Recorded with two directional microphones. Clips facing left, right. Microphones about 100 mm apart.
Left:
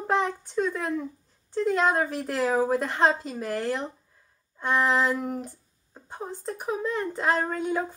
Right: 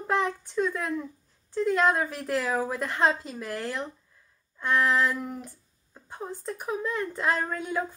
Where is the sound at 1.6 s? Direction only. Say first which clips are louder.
Even; 5° left (ahead or behind).